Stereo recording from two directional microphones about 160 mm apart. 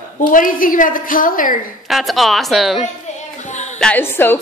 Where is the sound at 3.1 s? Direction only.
45° left (ahead or behind).